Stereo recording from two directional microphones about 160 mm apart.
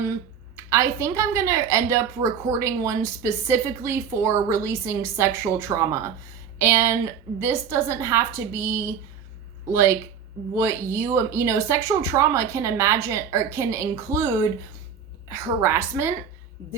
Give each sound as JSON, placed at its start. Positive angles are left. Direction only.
{"t": 0.5, "sound": "a woman's voice", "side_deg": -20}